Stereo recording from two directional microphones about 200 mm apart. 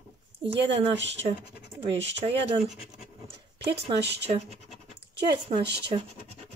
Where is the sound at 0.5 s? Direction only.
65° right (ahead or behind).